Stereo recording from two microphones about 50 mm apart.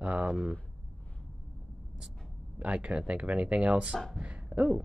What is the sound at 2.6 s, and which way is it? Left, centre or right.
Speech, right.